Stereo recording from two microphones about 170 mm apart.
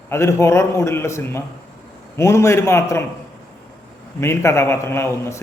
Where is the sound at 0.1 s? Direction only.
15° left (ahead or behind).